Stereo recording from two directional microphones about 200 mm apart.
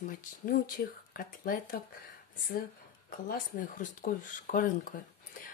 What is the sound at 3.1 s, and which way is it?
Speech, 45° left (ahead or behind).